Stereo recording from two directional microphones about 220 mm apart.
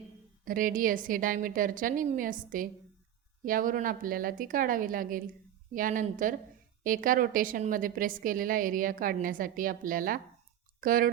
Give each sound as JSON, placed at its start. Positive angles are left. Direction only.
{"t": 0.4, "sound": "a woman's voice", "side_deg": -40}